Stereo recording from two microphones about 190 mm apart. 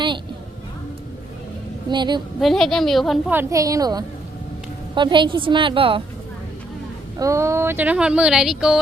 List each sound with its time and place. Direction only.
1.9 s a woman's voice: 25° right (ahead or behind)
2.4 s a woman's voice: centre (ahead or behind)
3.3 s a woman's voice: 15° right (ahead or behind)
7.2 s speech: 15° right (ahead or behind)